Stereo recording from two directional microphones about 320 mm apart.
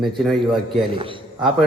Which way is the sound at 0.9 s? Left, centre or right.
Centre.